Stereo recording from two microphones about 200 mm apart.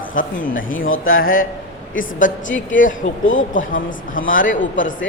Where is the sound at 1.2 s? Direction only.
45° left (ahead or behind).